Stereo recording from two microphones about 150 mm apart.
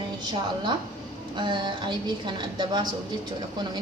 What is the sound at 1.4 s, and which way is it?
A woman's voice, 30° right (ahead or behind).